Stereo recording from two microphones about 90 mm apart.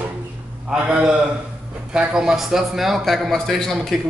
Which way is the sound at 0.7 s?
10° right (ahead or behind).